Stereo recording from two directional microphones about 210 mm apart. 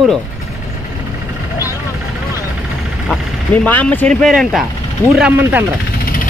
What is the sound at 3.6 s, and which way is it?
Speech, 10° left (ahead or behind).